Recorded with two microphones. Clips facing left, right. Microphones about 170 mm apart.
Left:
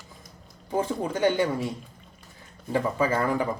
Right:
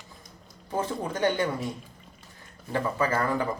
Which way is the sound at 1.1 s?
10° left (ahead or behind).